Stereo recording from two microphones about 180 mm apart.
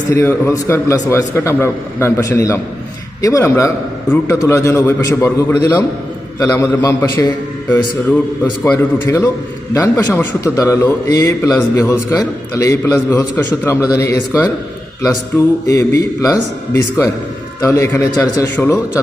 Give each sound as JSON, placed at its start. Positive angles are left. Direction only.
{"t": 0.1, "sound": "a man's voice", "side_deg": 15}
{"t": 9.0, "sound": "a man's voice", "side_deg": 10}
{"t": 15.6, "sound": "a man's voice", "side_deg": 20}